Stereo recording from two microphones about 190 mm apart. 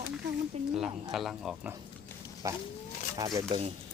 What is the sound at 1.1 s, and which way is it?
Speech, centre (ahead or behind).